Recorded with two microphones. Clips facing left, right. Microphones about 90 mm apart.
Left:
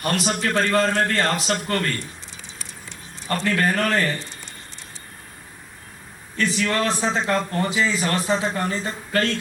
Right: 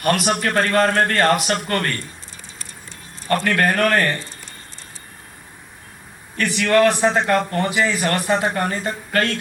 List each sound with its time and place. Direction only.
0.0 s a man's voice: 55° right (ahead or behind)
3.2 s a man's voice: 60° right (ahead or behind)
6.3 s a man's voice: 65° right (ahead or behind)